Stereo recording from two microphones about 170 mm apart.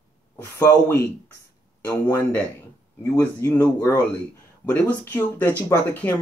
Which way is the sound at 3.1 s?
10° left (ahead or behind).